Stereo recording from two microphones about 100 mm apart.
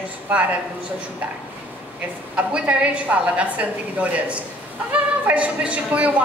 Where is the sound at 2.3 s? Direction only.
15° right (ahead or behind).